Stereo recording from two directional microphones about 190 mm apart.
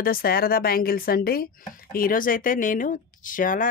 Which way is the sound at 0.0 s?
50° left (ahead or behind).